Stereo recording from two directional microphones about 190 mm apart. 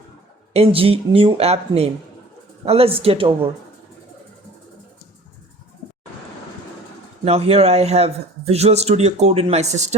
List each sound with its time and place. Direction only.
0.5 s a man's voice: 30° right (ahead or behind)
7.3 s a man's voice: 35° right (ahead or behind)